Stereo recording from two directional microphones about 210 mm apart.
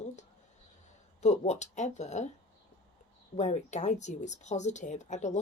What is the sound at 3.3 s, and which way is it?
Speech, 35° left (ahead or behind).